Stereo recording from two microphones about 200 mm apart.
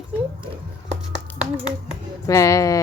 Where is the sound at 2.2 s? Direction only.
15° left (ahead or behind).